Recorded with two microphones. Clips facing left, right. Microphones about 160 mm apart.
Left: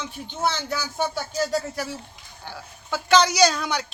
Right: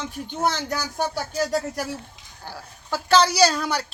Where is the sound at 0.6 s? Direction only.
40° right (ahead or behind).